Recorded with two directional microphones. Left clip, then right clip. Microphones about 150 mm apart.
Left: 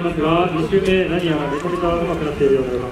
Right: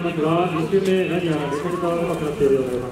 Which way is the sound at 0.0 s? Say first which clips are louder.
Left 3 dB; 10° left (ahead or behind).